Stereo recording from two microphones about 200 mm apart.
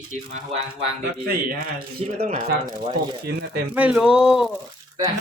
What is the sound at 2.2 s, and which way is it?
Speech, 35° right (ahead or behind).